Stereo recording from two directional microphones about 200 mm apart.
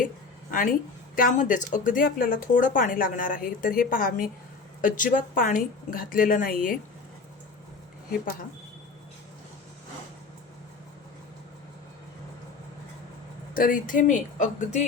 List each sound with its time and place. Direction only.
1.1 s speech: 40° left (ahead or behind)
13.5 s speech: 45° left (ahead or behind)